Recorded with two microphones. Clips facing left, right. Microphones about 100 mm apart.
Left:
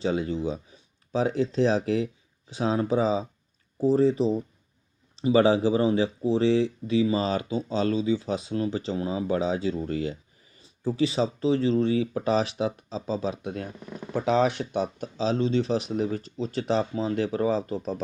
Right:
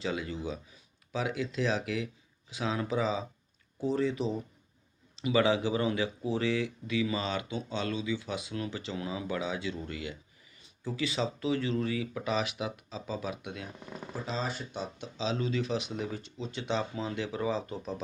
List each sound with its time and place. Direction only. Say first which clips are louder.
0.0 s speech: left 8 dB; 35° left (ahead or behind)
14.1 s speech: left 13 dB; 70° left (ahead or behind); by 18.0 s 35° left (ahead or behind)